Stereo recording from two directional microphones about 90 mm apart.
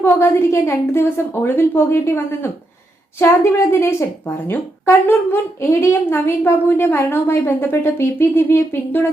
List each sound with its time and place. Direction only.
0.0 s a woman's voice: 30° left (ahead or behind)